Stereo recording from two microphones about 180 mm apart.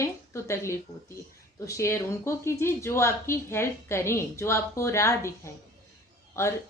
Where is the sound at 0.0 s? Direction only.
15° left (ahead or behind).